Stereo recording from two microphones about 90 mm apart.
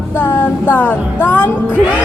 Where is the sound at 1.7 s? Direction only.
20° right (ahead or behind).